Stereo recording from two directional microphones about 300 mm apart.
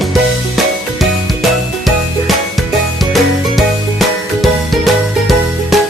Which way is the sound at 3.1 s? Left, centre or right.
Centre.